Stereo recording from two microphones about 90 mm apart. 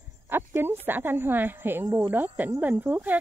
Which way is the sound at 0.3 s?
25° right (ahead or behind).